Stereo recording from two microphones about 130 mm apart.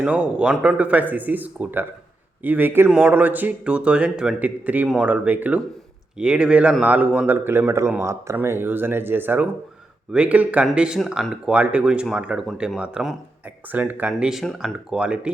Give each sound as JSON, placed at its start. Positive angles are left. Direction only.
{"t": 0.0, "sound": "speech", "side_deg": -10}